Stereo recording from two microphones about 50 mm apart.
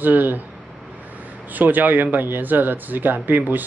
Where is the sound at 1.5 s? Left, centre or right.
Right.